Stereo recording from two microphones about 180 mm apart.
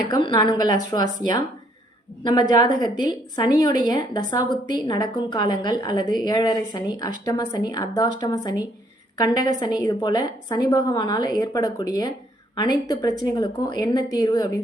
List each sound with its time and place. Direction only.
0.1 s a woman's voice: 20° left (ahead or behind)